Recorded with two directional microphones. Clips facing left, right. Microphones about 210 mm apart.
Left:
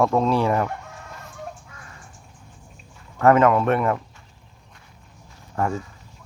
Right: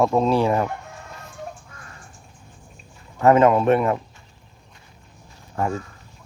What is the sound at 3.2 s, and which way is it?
Speech, 25° right (ahead or behind).